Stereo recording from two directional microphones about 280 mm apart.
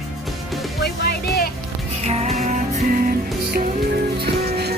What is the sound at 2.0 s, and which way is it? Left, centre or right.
Music, right.